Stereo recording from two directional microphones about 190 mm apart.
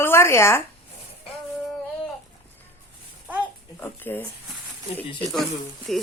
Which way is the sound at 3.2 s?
10° right (ahead or behind).